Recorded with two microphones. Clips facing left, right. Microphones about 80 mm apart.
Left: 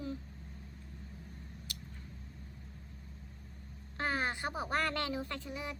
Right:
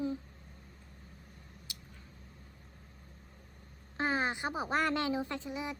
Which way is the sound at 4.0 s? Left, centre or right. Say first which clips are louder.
Right 3 dB; right.